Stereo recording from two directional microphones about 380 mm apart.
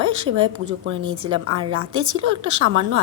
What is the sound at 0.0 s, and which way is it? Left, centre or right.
A woman's voice, right.